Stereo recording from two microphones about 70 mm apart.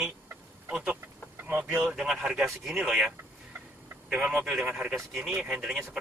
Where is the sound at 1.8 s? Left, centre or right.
Centre.